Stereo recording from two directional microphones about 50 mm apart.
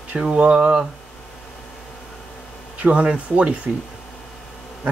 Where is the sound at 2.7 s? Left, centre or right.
Right.